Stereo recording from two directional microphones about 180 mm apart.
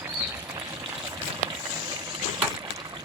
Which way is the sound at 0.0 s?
10° right (ahead or behind).